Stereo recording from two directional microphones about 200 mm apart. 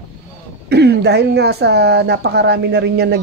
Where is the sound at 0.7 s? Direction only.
55° right (ahead or behind).